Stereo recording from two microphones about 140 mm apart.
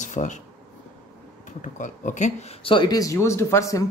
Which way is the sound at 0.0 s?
60° left (ahead or behind).